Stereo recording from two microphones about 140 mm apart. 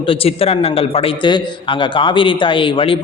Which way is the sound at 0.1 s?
45° left (ahead or behind).